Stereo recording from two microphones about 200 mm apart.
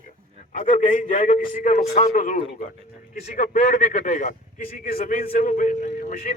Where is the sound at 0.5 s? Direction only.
40° left (ahead or behind).